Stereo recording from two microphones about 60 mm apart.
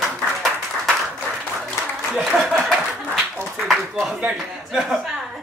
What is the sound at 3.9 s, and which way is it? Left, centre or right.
A man's voice, centre.